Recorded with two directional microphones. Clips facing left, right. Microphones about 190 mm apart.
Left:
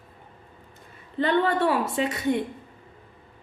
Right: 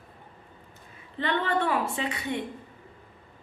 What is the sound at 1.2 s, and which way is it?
Speech, 35° left (ahead or behind).